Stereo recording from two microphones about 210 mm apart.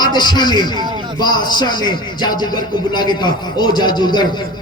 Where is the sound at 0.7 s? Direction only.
20° right (ahead or behind).